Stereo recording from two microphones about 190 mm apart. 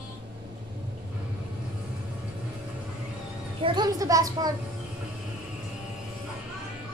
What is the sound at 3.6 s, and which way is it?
Speech, 20° right (ahead or behind).